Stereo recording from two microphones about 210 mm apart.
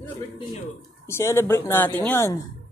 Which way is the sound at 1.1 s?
10° left (ahead or behind).